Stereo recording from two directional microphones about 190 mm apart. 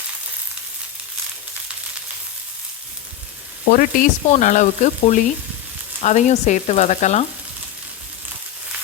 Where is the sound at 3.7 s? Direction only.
45° left (ahead or behind).